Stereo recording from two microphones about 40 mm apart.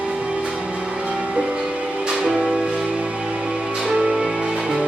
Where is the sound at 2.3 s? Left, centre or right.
Centre.